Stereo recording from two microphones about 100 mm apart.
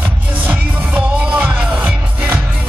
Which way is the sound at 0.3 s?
15° right (ahead or behind).